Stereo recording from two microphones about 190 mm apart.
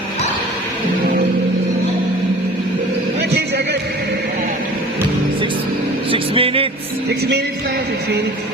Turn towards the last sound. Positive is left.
turn(degrees=-30)  # may be behind; listen again after turning